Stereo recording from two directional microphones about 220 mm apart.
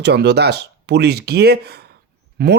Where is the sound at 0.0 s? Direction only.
50° right (ahead or behind).